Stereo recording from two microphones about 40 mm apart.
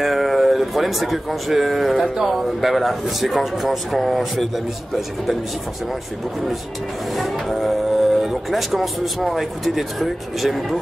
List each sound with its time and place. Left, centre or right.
0.0 s speech: centre
7.2 s music: centre
8.5 s speech: centre